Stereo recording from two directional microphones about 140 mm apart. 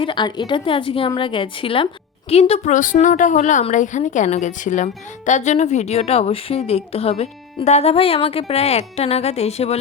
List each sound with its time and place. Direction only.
0.0 s a woman's voice: 35° left (ahead or behind)
2.7 s a woman's voice: 65° left (ahead or behind); by 9.7 s 50° left (ahead or behind)